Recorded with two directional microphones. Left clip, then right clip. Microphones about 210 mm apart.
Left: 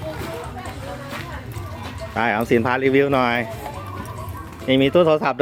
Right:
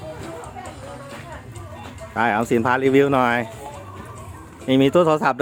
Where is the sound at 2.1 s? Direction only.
25° right (ahead or behind).